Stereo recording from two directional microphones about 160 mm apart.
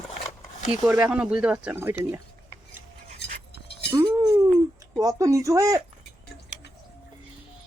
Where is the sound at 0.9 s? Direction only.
5° right (ahead or behind).